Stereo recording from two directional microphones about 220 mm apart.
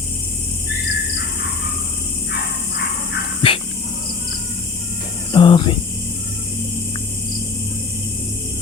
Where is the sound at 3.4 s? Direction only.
25° left (ahead or behind).